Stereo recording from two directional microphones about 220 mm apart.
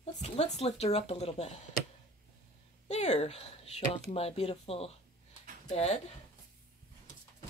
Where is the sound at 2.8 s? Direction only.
30° left (ahead or behind).